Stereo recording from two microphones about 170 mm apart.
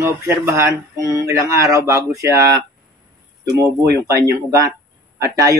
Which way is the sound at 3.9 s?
20° right (ahead or behind).